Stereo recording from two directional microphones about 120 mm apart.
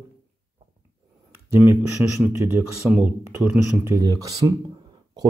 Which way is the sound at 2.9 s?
5° right (ahead or behind).